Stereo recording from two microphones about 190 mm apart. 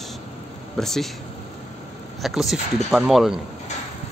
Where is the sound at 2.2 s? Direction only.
Centre (ahead or behind).